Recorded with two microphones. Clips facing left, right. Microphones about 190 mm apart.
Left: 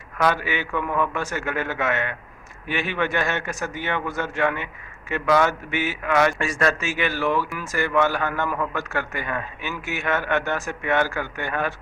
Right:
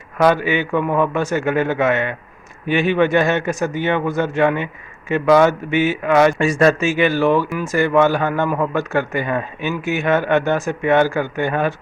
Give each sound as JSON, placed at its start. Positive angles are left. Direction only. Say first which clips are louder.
{"t": 0.2, "sound": "a man's voice", "louder": "right 7 dB", "side_deg": -20}